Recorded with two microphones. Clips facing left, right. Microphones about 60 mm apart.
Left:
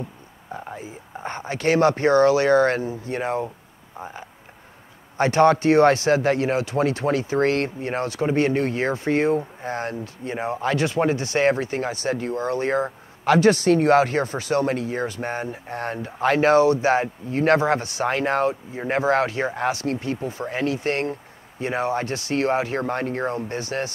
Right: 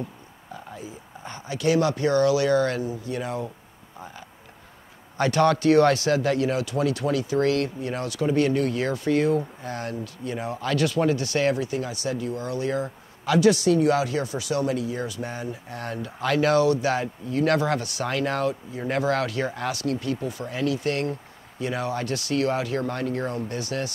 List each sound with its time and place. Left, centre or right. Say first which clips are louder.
0.5 s speech: left 4 dB; left
4.0 s frog: left 5 dB; left
5.1 s speech: left 4 dB; left